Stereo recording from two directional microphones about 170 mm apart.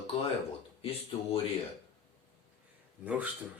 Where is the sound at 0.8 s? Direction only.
35° left (ahead or behind).